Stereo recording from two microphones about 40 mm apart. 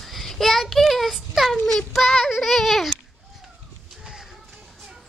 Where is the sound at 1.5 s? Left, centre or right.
Centre.